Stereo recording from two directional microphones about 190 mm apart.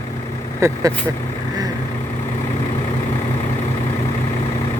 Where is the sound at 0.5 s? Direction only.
15° right (ahead or behind).